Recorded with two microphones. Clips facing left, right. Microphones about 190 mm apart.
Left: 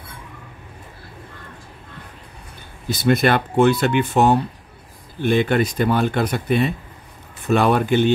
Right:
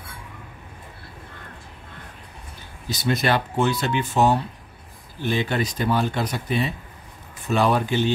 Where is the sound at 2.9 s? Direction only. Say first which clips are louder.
Left 5 dB; 55° left (ahead or behind).